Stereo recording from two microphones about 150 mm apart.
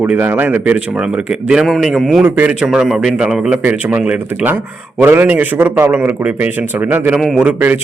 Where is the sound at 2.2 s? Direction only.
10° right (ahead or behind).